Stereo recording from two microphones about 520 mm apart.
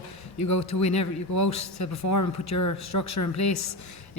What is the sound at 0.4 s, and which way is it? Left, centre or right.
Speech, left.